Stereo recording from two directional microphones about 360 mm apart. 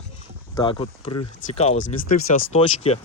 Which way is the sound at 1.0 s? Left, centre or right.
Left.